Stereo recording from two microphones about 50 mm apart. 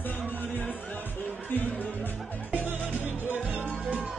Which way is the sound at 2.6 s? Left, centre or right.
Right.